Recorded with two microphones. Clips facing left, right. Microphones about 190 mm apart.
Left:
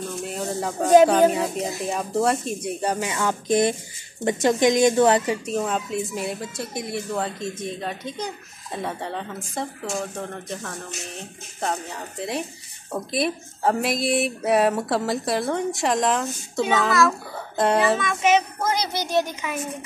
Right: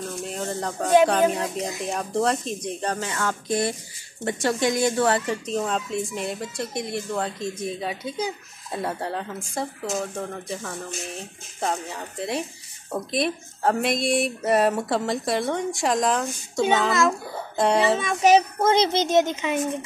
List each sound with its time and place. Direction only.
0.2 s a sound: centre (ahead or behind)
1.3 s speech: centre (ahead or behind)
17.9 s speech: 30° right (ahead or behind)